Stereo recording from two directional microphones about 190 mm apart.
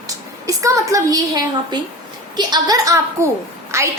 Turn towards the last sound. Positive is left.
turn(degrees=-15)  # may be behind; listen again after turning